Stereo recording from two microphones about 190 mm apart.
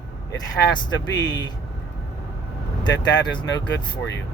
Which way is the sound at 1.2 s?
20° left (ahead or behind).